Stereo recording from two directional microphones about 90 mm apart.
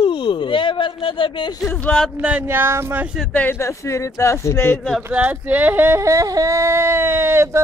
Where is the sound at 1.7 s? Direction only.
20° left (ahead or behind).